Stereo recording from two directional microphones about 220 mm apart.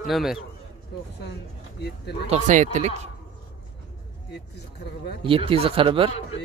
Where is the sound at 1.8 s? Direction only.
50° left (ahead or behind).